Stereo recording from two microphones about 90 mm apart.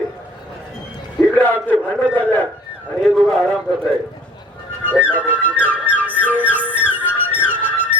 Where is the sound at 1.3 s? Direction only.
20° left (ahead or behind).